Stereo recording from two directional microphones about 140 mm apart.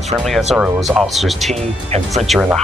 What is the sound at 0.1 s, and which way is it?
Speech, centre (ahead or behind).